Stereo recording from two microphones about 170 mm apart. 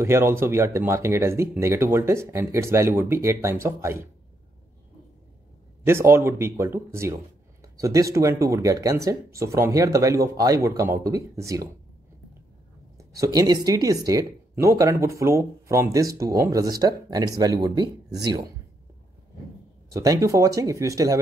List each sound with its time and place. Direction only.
0.0 s speech: 15° right (ahead or behind)
5.9 s speech: 15° right (ahead or behind)
12.9 s speech: 20° right (ahead or behind)
19.9 s speech: 20° right (ahead or behind)